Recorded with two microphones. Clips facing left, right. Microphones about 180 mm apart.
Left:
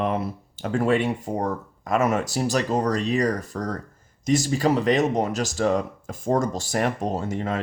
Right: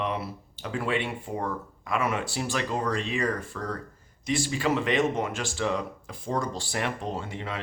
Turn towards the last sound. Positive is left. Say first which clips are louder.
# left 7 dB
turn(degrees=45)  # may be behind; listen again after turning